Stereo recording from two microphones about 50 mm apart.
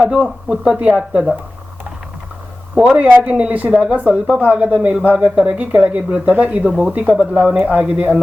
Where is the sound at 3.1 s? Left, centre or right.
Right.